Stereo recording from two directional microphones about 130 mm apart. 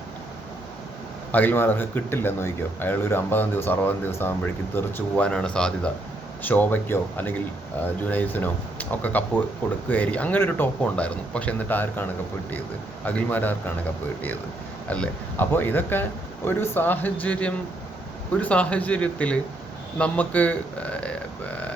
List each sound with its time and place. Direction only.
1.3 s speech: 15° left (ahead or behind)
13.1 s speech: 15° left (ahead or behind)
14.8 s speech: 10° left (ahead or behind)